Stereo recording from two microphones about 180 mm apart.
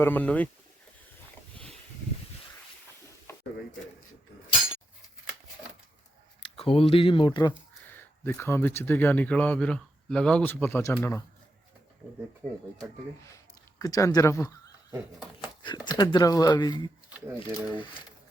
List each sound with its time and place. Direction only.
0.0 s speech: 10° left (ahead or behind)
3.3 s a sound: 15° left (ahead or behind)
6.6 s speech: 30° left (ahead or behind)
7.9 s speech: 10° left (ahead or behind)
13.3 s a sound: 20° left (ahead or behind)
15.6 s speech: 25° left (ahead or behind)
17.2 s speech: 10° right (ahead or behind)